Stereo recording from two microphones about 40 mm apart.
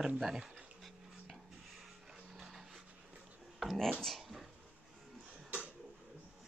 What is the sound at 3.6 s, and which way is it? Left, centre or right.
Speech, centre.